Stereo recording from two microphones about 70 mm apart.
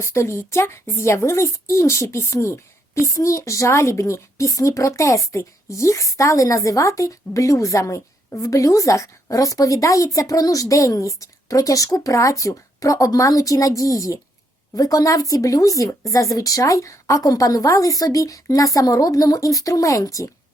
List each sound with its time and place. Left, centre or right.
0.0 s a woman's voice: left